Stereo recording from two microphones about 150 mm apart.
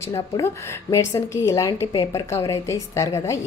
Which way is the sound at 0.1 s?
20° left (ahead or behind).